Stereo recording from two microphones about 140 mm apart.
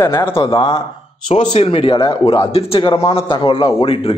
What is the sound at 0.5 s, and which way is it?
Speech, 35° left (ahead or behind).